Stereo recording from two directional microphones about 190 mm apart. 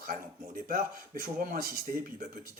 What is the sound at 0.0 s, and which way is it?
Speech, 50° right (ahead or behind).